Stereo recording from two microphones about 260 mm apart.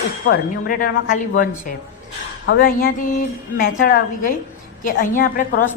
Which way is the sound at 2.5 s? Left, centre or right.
Left.